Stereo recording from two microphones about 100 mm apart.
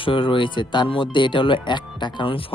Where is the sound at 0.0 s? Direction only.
60° left (ahead or behind).